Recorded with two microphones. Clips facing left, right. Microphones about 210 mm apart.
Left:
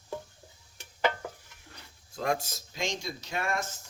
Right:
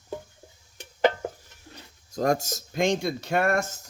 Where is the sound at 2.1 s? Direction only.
45° right (ahead or behind).